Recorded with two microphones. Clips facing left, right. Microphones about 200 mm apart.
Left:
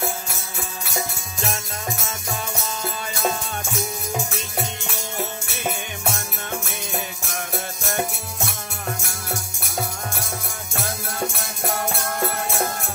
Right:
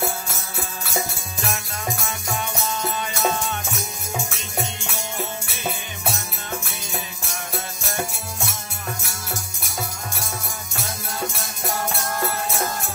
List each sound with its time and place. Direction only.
2.0 s music: 35° left (ahead or behind)
9.6 s music: 55° left (ahead or behind)